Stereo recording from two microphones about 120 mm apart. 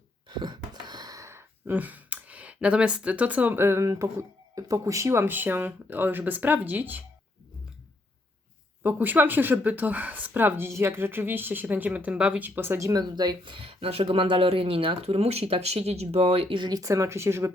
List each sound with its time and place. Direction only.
0.3 s speech: 40° right (ahead or behind); by 7.0 s 15° right (ahead or behind)
8.8 s speech: 15° right (ahead or behind); by 16.6 s 55° right (ahead or behind)
16.6 s speech: 35° right (ahead or behind)